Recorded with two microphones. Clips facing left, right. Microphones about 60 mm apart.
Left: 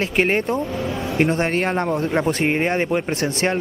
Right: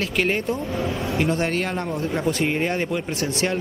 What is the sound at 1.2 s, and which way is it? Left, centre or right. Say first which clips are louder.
Speech: left 4 dB; left.